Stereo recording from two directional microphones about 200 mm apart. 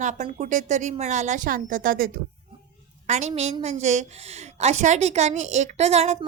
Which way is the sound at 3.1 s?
35° right (ahead or behind).